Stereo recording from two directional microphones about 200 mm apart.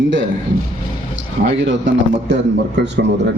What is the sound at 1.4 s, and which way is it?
Speech, 35° right (ahead or behind).